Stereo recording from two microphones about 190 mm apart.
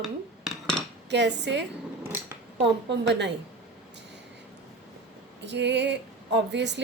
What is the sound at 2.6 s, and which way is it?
Speech, 65° right (ahead or behind).